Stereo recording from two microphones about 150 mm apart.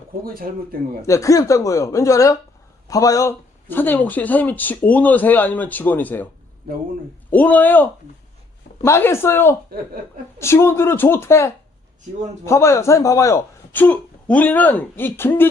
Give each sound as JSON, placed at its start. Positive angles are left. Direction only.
{"t": 0.3, "sound": "speech", "side_deg": -75}
{"t": 1.0, "sound": "speech", "side_deg": 20}
{"t": 7.3, "sound": "speech", "side_deg": 10}